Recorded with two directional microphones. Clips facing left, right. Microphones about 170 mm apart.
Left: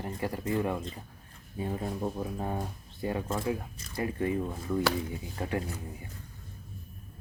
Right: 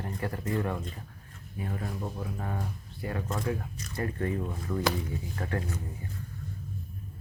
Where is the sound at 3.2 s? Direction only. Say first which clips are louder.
Left 1 dB; 10° left (ahead or behind).